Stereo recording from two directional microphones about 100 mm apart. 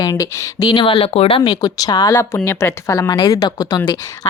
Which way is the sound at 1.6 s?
45° left (ahead or behind).